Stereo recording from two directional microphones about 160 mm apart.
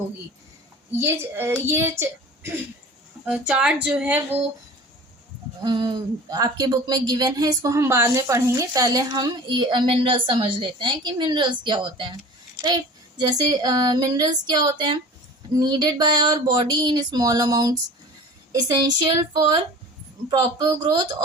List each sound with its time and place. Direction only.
0.9 s a woman's voice: 15° right (ahead or behind)
5.6 s speech: 30° right (ahead or behind)